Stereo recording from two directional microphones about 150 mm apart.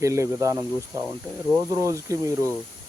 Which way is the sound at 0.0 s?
20° right (ahead or behind).